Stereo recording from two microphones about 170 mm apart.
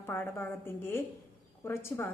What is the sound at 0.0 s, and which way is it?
A woman's voice, 10° left (ahead or behind).